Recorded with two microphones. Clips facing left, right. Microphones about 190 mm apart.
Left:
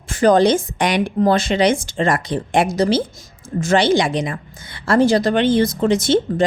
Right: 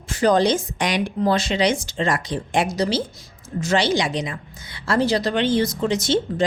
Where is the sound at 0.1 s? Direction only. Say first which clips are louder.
Left 4 dB; 50° left (ahead or behind).